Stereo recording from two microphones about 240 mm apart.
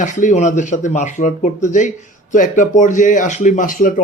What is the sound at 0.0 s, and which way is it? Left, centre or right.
Speech, left.